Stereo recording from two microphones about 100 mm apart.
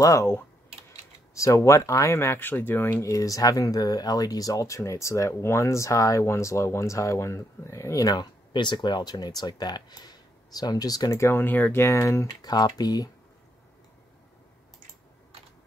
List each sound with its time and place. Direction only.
0.0 s speech: 30° left (ahead or behind)
11.1 s speech: 25° left (ahead or behind)
12.4 s speech: 40° left (ahead or behind)